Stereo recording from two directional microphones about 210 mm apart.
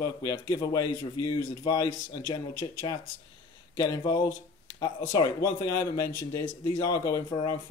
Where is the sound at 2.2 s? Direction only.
20° left (ahead or behind).